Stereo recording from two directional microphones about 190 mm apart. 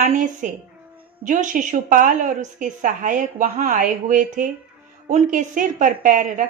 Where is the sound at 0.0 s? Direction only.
45° right (ahead or behind).